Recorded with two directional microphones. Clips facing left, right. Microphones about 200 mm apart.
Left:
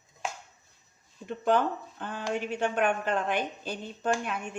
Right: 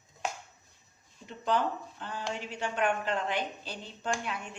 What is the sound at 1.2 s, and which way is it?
A woman's voice, 55° left (ahead or behind).